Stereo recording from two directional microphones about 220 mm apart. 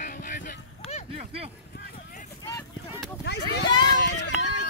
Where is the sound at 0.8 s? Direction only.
30° left (ahead or behind).